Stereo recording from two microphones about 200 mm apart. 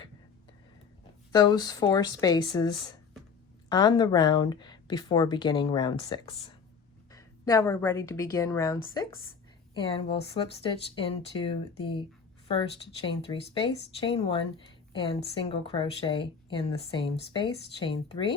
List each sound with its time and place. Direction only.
1.3 s speech: 20° left (ahead or behind)
3.7 s a woman's voice: 20° left (ahead or behind)
13.1 s speech: 25° left (ahead or behind)